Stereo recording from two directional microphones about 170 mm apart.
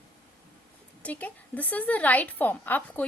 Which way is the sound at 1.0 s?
10° left (ahead or behind).